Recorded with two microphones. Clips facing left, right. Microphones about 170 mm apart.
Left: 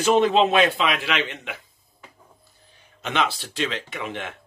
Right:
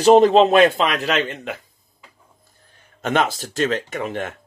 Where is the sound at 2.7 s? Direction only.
45° right (ahead or behind).